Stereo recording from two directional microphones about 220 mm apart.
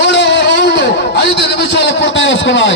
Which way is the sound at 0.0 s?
50° left (ahead or behind).